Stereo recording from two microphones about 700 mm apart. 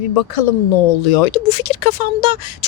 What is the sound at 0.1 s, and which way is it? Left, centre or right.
Speech, left.